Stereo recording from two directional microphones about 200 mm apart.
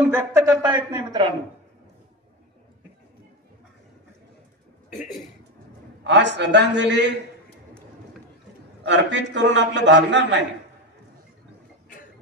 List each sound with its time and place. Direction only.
0.0 s speech: 10° right (ahead or behind)
4.9 s a man's voice: centre (ahead or behind)
6.0 s a man's voice: 60° right (ahead or behind)
8.8 s a man's voice: 65° right (ahead or behind)